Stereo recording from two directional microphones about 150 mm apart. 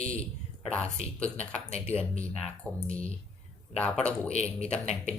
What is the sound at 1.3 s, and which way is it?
Speech, 45° left (ahead or behind).